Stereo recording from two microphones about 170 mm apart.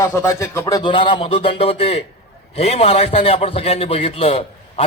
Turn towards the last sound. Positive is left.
turn(degrees=35)  # may be behind; listen again after turning